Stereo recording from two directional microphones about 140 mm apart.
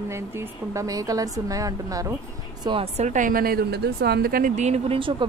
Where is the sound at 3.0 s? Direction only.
65° right (ahead or behind); by 4.5 s 90° right.